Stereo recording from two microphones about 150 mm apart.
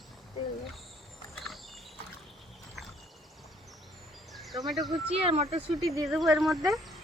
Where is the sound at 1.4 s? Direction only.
Centre (ahead or behind).